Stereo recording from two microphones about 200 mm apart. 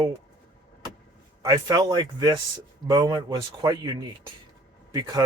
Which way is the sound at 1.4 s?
20° right (ahead or behind).